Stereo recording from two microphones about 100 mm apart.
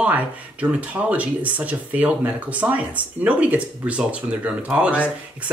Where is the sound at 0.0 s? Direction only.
15° right (ahead or behind).